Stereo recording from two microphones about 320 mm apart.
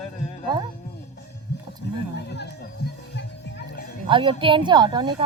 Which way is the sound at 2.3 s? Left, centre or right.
Left.